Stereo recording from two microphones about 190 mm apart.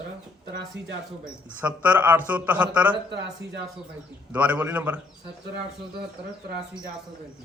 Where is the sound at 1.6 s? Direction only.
5° right (ahead or behind).